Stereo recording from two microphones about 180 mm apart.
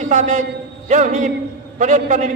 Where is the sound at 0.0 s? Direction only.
45° right (ahead or behind).